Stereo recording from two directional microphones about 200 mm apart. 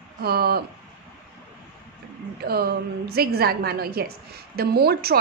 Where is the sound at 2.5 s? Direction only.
50° right (ahead or behind).